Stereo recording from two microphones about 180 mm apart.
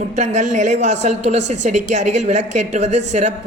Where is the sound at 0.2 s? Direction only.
40° right (ahead or behind).